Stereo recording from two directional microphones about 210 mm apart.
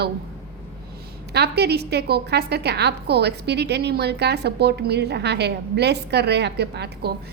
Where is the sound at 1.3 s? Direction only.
50° right (ahead or behind).